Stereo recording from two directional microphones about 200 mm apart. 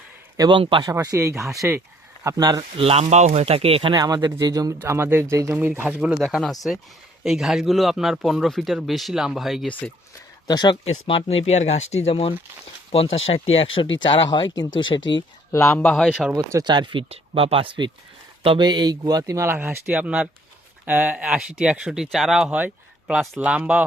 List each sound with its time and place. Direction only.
0.3 s speech: 20° right (ahead or behind); by 9.9 s centre (ahead or behind)
10.4 s speech: 20° left (ahead or behind)
15.5 s speech: 10° left (ahead or behind)
16.3 s speech: 20° right (ahead or behind)